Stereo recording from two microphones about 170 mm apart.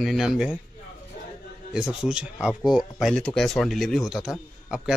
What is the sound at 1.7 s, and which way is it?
Speech, 5° right (ahead or behind).